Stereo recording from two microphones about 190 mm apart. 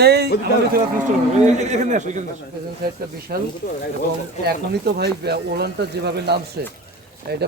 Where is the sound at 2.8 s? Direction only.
50° right (ahead or behind).